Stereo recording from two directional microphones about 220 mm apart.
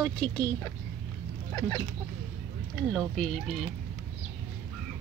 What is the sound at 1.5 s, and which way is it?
Speech, 15° left (ahead or behind).